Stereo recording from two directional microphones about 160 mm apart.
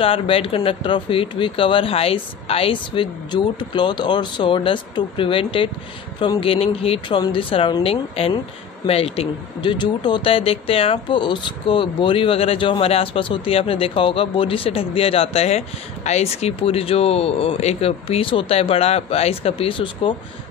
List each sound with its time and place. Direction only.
0.0 s speech: 35° left (ahead or behind)